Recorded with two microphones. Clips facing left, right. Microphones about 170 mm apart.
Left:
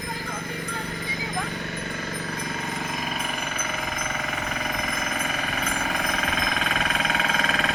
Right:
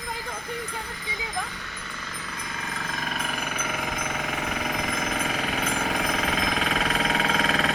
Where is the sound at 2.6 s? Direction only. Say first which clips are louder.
Left 3 dB; 20° left (ahead or behind).